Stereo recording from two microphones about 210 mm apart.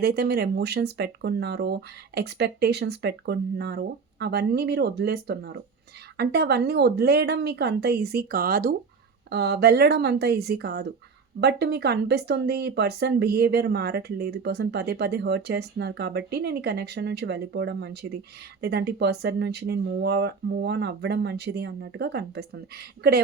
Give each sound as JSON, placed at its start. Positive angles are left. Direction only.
{"t": 0.0, "sound": "speech", "side_deg": -50}